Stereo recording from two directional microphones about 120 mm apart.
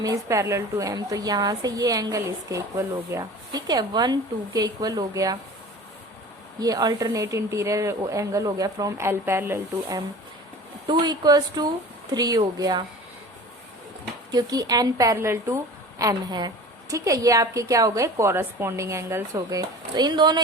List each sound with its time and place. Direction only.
0.0 s a woman's voice: 30° right (ahead or behind)
6.6 s a woman's voice: 30° right (ahead or behind)
10.8 s a woman's voice: 35° right (ahead or behind)
14.3 s a woman's voice: 35° right (ahead or behind)